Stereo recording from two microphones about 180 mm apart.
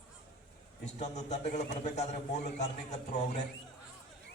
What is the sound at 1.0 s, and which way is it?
A man's voice, 40° left (ahead or behind).